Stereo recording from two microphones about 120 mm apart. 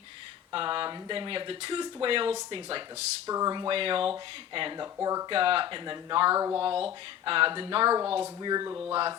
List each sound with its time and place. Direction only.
0.5 s speech: 45° right (ahead or behind)
3.2 s speech: 30° right (ahead or behind)
3.7 s speech: 45° right (ahead or behind)
4.9 s speech: 25° right (ahead or behind)
5.3 s speech: 50° right (ahead or behind); by 6.6 s 30° right (ahead or behind)
6.6 s speech: 50° right (ahead or behind)
7.9 s speech: 30° right (ahead or behind)